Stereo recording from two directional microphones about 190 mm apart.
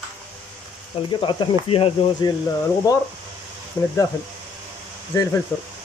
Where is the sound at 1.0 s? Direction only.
25° left (ahead or behind).